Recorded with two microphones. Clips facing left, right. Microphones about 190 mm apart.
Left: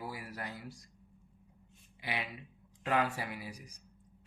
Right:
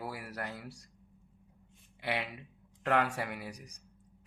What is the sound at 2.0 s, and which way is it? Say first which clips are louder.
Speech: right 4 dB; 65° right (ahead or behind).